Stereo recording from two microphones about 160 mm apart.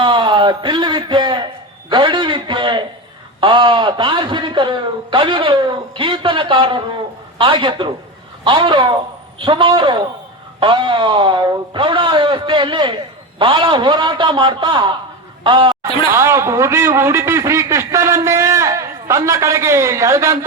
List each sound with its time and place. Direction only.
0.0 s a sound: 30° right (ahead or behind)
1.9 s a man's voice: 30° right (ahead or behind)
16.1 s a man's voice: 15° right (ahead or behind)